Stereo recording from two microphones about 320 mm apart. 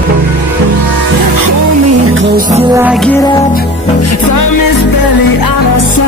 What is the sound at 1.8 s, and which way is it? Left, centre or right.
Music, right.